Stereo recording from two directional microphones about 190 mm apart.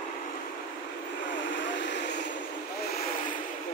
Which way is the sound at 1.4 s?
75° left (ahead or behind).